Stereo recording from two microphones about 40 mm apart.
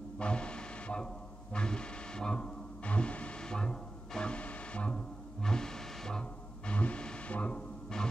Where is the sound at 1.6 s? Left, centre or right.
Left.